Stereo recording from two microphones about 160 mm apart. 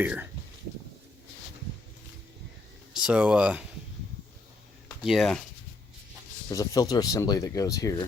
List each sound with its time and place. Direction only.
0.0 s speech: 10° right (ahead or behind)
2.9 s speech: 5° right (ahead or behind)
5.0 s speech: centre (ahead or behind)
6.5 s speech: 20° left (ahead or behind)